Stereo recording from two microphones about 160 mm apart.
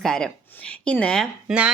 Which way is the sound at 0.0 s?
5° left (ahead or behind).